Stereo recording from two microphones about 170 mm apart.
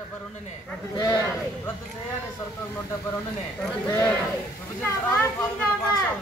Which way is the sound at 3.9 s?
10° left (ahead or behind).